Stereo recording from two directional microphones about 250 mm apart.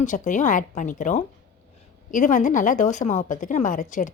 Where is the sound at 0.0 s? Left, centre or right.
Left.